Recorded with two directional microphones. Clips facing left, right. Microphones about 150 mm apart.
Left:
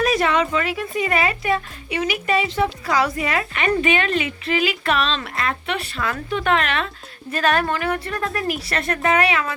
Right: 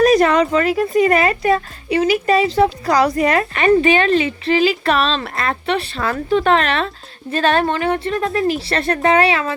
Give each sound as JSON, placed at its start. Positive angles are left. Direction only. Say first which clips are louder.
{"t": 0.0, "sound": "speech", "louder": "right 7 dB", "side_deg": -40}